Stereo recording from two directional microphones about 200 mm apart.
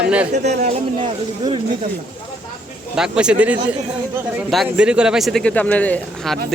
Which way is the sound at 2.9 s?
5° right (ahead or behind).